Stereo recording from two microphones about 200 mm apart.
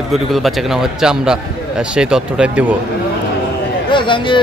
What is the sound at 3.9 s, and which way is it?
Speech, 25° left (ahead or behind).